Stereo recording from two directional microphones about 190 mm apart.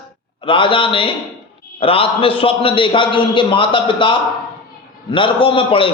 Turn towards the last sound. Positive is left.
turn(degrees=30)  # may be behind; listen again after turning